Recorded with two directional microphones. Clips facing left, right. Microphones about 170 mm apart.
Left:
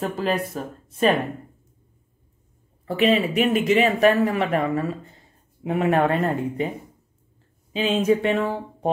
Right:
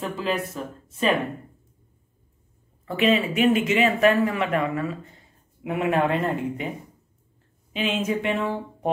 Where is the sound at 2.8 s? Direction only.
35° left (ahead or behind).